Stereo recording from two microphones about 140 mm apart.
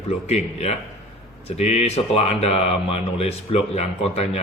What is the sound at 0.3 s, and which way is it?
A man's voice, 50° left (ahead or behind).